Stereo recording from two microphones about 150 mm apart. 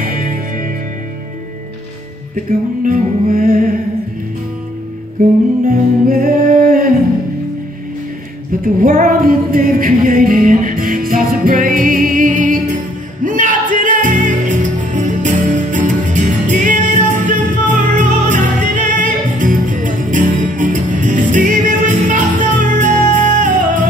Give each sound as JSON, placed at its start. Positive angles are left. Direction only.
{"t": 0.0, "sound": "music", "side_deg": -70}
{"t": 2.3, "sound": "music", "side_deg": -65}
{"t": 5.2, "sound": "music", "side_deg": -70}
{"t": 8.8, "sound": "a capella", "side_deg": -70}
{"t": 22.6, "sound": "music", "side_deg": -55}